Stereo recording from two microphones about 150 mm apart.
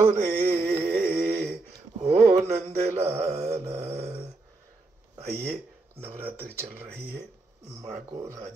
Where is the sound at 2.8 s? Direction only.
45° right (ahead or behind).